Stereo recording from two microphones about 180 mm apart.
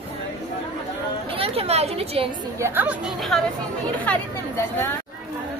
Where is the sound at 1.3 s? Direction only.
35° right (ahead or behind).